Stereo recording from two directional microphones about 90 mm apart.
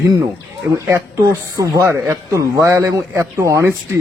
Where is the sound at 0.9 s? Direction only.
35° right (ahead or behind).